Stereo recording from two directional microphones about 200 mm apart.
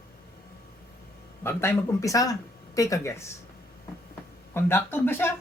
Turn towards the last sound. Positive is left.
turn(degrees=10)  # may be behind; listen again after turning